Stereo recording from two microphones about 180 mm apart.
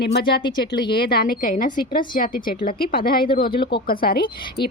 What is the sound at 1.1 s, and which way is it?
A woman's voice, 55° left (ahead or behind).